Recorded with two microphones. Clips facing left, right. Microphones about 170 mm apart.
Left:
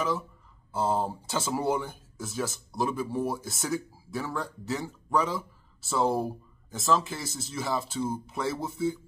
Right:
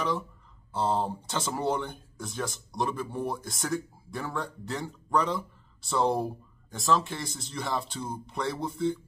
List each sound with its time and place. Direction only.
0.7 s speech: 5° left (ahead or behind)